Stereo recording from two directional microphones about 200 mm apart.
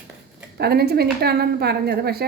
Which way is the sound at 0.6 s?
50° right (ahead or behind).